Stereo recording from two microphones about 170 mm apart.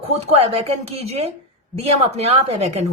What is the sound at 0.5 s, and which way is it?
Speech, 35° right (ahead or behind).